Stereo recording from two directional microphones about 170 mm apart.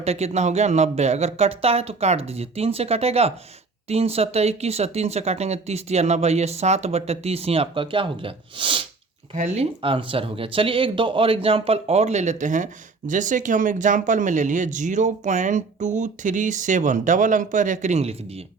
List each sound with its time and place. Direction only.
0.0 s speech: 40° right (ahead or behind)
9.3 s speech: 40° right (ahead or behind)